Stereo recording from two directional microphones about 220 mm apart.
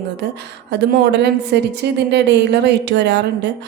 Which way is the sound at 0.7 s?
50° right (ahead or behind).